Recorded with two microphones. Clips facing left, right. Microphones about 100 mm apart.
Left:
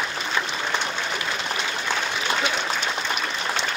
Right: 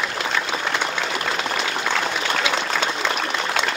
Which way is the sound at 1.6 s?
75° right (ahead or behind).